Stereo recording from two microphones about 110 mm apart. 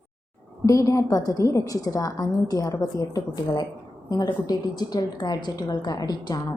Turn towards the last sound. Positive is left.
turn(degrees=35)  # may be behind; listen again after turning